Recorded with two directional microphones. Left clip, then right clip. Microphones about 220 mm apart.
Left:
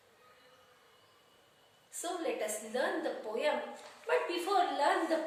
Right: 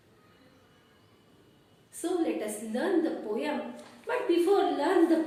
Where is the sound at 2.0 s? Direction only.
15° left (ahead or behind).